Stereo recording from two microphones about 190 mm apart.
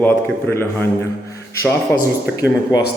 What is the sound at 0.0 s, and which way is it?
A man's voice, 10° left (ahead or behind).